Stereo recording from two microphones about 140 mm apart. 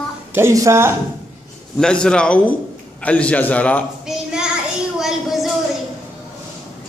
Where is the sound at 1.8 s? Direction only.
5° left (ahead or behind).